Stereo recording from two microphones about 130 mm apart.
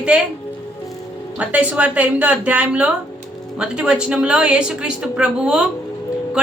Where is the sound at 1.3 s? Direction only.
10° right (ahead or behind).